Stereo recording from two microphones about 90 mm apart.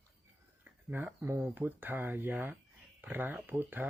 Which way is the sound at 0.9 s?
20° right (ahead or behind).